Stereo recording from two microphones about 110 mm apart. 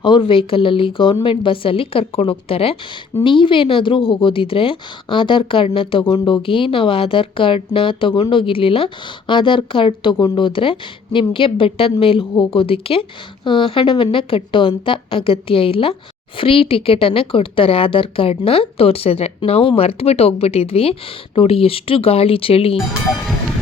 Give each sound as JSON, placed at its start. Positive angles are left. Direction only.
{"t": 0.0, "sound": "speech", "side_deg": 50}